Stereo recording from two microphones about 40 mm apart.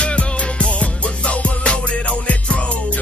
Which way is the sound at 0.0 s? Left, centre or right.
Left.